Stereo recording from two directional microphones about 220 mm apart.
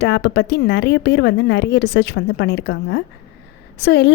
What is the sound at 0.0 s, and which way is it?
A woman's voice, 50° left (ahead or behind).